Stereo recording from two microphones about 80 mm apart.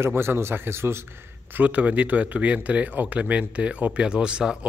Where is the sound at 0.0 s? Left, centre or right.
Right.